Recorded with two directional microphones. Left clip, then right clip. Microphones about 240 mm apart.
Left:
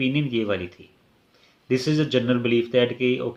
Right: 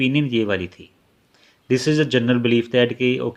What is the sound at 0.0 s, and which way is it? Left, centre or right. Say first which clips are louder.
Speech: right 4 dB; right.